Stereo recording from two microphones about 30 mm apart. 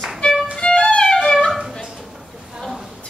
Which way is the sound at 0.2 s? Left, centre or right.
Left.